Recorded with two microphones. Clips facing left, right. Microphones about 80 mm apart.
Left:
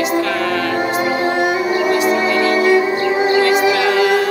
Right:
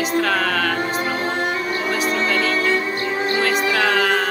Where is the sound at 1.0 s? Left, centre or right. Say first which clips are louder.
Left 6 dB; centre.